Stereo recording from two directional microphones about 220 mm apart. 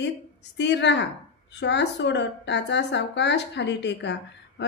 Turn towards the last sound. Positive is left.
turn(degrees=50)  # may be behind; listen again after turning